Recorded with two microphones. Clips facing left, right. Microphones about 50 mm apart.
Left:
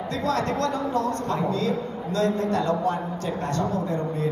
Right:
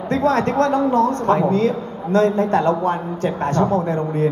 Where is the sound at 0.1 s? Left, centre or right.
Right.